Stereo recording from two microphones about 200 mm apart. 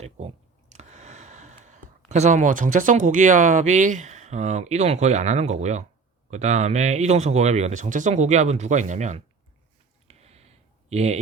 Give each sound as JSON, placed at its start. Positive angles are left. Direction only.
{"t": 0.7, "sound": "a sound", "side_deg": -35}
{"t": 1.6, "sound": "speech", "side_deg": -35}
{"t": 10.1, "sound": "clicking", "side_deg": -30}